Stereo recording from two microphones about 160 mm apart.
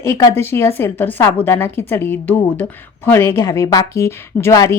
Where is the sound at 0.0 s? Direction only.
15° left (ahead or behind).